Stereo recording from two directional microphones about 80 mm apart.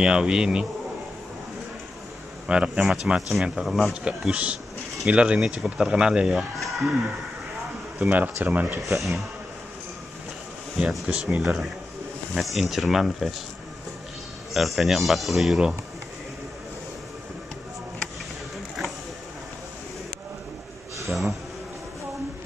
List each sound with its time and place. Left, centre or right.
0.0 s speech: centre
2.4 s speech: centre
4.0 s speech: centre
8.1 s speech: right
8.7 s speech: centre
10.8 s speech: centre
11.1 s speech: centre
14.5 s speech: centre
21.1 s speech: centre